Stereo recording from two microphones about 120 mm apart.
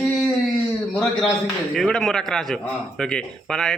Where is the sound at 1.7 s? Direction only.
5° left (ahead or behind).